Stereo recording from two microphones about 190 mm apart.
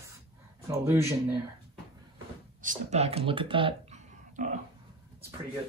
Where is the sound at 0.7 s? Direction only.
15° right (ahead or behind).